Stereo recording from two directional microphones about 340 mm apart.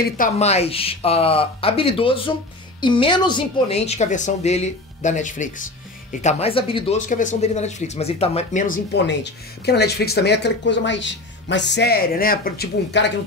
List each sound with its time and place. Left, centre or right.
0.0 s speech: left